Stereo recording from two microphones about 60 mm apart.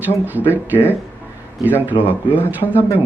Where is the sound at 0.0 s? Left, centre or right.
Right.